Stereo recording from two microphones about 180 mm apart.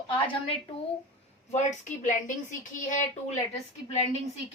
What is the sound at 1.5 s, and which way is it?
A woman's voice, 40° left (ahead or behind).